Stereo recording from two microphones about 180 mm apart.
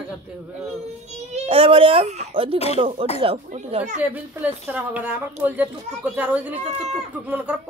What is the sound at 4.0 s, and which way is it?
Speech, 10° right (ahead or behind).